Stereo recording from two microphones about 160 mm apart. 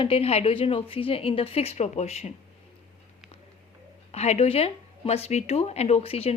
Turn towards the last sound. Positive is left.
turn(degrees=40)  # may be behind; listen again after turning